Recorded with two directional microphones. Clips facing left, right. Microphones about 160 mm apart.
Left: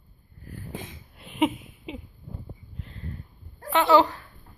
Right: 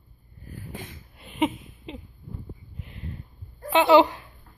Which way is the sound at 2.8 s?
15° right (ahead or behind).